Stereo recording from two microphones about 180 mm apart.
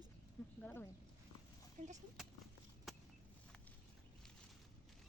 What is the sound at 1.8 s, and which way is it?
Speech, 45° right (ahead or behind).